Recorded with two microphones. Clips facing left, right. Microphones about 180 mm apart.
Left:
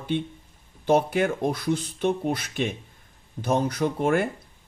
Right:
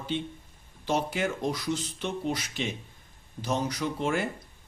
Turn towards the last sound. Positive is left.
turn(degrees=55)  # may be behind; listen again after turning